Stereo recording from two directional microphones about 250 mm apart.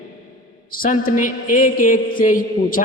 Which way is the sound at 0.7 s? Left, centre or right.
Left.